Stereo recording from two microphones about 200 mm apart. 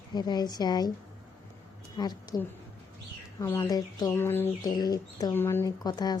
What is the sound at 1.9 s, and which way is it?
A woman's voice, 20° left (ahead or behind).